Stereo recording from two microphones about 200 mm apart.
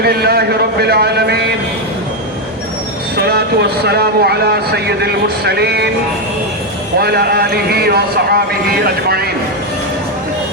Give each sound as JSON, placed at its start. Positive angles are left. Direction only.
{"t": 0.0, "sound": "a man's voice", "side_deg": -50}
{"t": 3.2, "sound": "a man's voice", "side_deg": -55}
{"t": 7.0, "sound": "a man's voice", "side_deg": -55}